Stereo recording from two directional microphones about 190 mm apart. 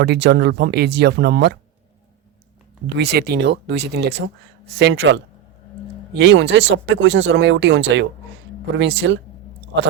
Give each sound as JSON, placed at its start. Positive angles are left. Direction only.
{"t": 0.0, "sound": "speech", "side_deg": -65}
{"t": 2.9, "sound": "speech", "side_deg": -60}